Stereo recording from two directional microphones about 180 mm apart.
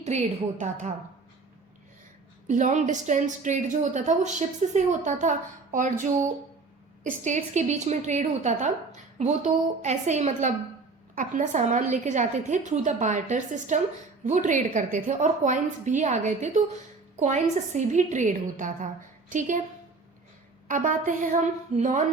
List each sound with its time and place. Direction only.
0.1 s a woman's voice: 40° right (ahead or behind)
2.5 s a woman's voice: 45° right (ahead or behind)
20.7 s a woman's voice: 45° right (ahead or behind)